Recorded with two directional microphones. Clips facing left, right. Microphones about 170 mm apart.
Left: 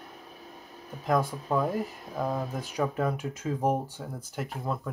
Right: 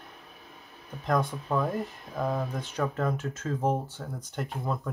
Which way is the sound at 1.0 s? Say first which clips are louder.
Left 1 dB; 5° left (ahead or behind).